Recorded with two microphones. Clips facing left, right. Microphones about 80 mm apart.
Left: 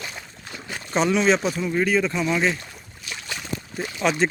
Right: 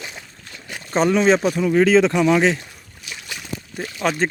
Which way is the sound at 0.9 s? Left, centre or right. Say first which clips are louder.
Right 3 dB; right.